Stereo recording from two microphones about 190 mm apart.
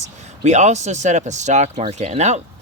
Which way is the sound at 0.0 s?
35° right (ahead or behind).